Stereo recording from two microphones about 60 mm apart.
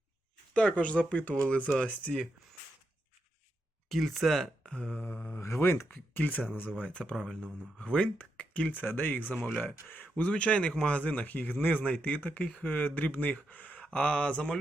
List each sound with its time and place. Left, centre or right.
0.5 s speech: left
3.8 s speech: centre
4.6 s mantra: centre
5.4 s speech: left
6.1 s speech: left